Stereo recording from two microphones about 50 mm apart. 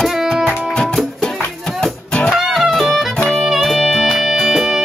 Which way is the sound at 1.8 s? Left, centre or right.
Centre.